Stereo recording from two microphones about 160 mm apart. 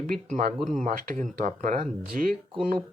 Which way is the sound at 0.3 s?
50° right (ahead or behind).